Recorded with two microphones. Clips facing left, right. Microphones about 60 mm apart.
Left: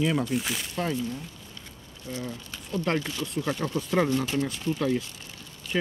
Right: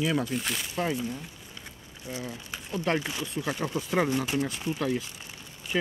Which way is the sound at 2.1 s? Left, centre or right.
Centre.